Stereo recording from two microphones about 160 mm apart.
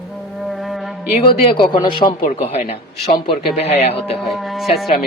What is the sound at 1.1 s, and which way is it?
Speech, 35° left (ahead or behind).